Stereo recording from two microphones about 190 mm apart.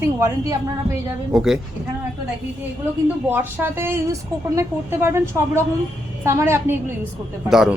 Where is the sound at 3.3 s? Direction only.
10° right (ahead or behind).